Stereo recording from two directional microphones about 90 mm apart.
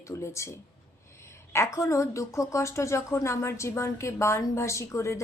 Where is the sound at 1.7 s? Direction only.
35° left (ahead or behind).